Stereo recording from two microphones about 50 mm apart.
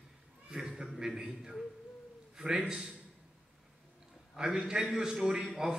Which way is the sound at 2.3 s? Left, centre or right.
Centre.